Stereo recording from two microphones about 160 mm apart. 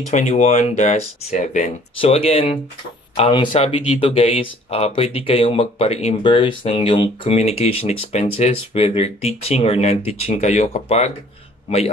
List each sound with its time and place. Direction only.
0.1 s speech: 55° left (ahead or behind)
2.0 s speech: 35° left (ahead or behind)